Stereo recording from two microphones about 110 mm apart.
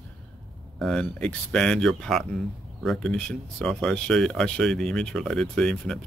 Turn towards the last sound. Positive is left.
turn(degrees=5)  # may be behind; listen again after turning